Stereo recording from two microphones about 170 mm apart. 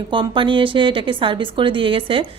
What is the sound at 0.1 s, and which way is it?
A woman's voice, 30° right (ahead or behind).